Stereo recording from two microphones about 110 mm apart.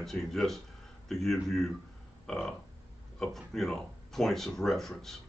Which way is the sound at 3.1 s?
5° left (ahead or behind).